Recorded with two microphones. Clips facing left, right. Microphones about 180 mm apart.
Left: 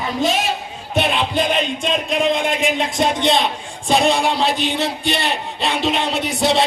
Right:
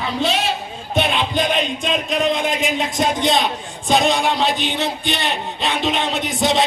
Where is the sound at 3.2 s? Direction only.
25° left (ahead or behind).